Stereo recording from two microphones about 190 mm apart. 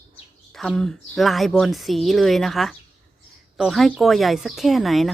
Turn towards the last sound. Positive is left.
turn(degrees=0)  # may be behind; listen again after turning